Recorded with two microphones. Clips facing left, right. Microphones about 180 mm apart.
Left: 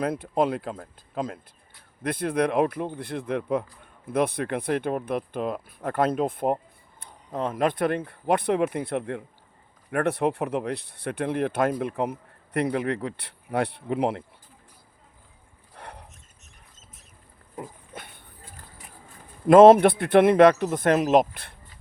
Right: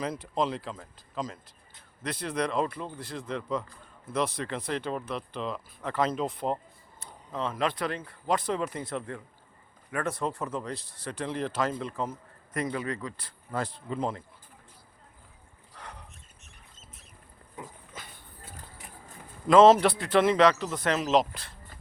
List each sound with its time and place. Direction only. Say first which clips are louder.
0.0 s speech: left 6 dB; 55° left (ahead or behind)
15.7 s a sound: left 3 dB; 60° left (ahead or behind)
17.6 s pig: left 5 dB; 60° left (ahead or behind)
19.5 s speech: left 5 dB; 55° left (ahead or behind)